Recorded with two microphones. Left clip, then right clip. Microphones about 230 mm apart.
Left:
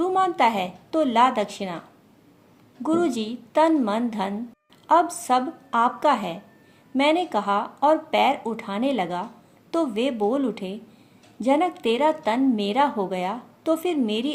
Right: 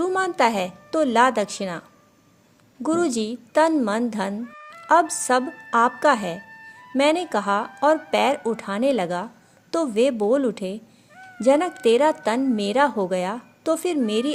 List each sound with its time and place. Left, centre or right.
0.0 s a woman's voice: right
2.8 s speech: right